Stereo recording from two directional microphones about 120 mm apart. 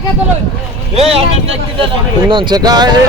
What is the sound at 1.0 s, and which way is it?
Speech, 55° right (ahead or behind).